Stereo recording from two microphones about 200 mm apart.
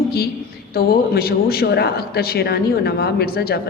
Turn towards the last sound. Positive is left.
turn(degrees=50)  # may be behind; listen again after turning